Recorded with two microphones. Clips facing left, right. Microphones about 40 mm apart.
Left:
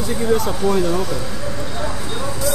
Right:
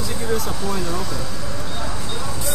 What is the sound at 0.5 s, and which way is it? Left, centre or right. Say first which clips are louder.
Speech: left 7 dB; left.